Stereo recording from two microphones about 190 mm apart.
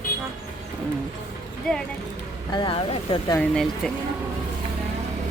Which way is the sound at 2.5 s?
25° left (ahead or behind).